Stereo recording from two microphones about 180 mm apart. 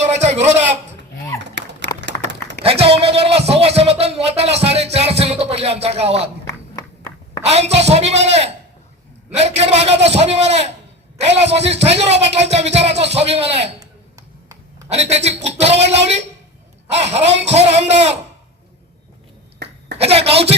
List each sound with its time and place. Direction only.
0.0 s speech: 40° right (ahead or behind)
1.8 s clapping: 70° right (ahead or behind)
2.6 s speech: 35° right (ahead or behind)
6.4 s a sound: 15° left (ahead or behind)
7.4 s speech: 35° right (ahead or behind)
14.2 s a sound: 20° right (ahead or behind)
14.8 s speech: 35° right (ahead or behind)
20.0 s speech: 35° right (ahead or behind)